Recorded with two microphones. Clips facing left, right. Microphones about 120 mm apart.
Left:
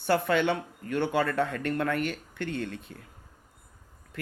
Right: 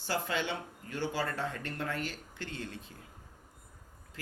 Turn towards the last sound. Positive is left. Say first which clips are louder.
# left 8 dB
turn(degrees=60)  # may be behind; listen again after turning